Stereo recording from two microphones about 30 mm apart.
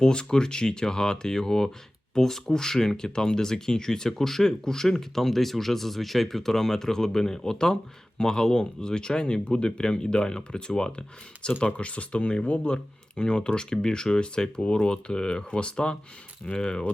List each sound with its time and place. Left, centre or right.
0.0 s speech: left